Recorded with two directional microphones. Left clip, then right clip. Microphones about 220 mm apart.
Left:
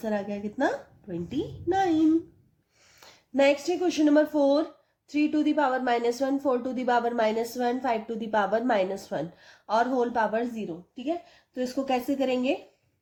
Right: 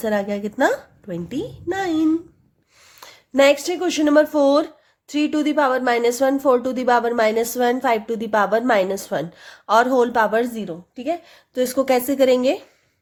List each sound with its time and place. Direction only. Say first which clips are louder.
0.0 s speech: right 9 dB; 35° right (ahead or behind)
10.9 s a woman's voice: right 7 dB; 45° right (ahead or behind)